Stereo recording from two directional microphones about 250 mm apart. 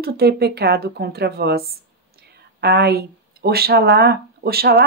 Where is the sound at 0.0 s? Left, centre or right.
Right.